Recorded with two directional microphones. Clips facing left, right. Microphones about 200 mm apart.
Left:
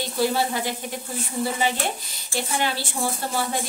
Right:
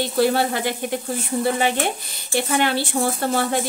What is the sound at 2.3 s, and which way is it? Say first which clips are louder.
Speech: right 6 dB; 60° right (ahead or behind).